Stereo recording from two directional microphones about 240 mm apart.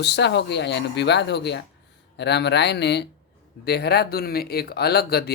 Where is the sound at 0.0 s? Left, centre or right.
Left.